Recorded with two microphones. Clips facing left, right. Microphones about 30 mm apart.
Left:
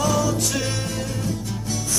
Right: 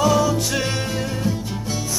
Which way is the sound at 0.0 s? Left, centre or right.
Centre.